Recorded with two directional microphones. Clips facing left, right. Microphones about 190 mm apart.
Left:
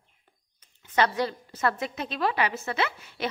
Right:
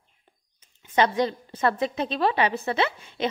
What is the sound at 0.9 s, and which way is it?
A woman's voice, 25° right (ahead or behind).